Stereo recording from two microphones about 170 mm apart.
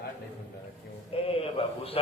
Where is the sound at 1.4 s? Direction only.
35° left (ahead or behind).